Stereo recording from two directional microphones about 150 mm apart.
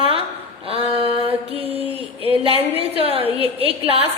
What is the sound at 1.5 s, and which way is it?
A woman's voice, 40° right (ahead or behind).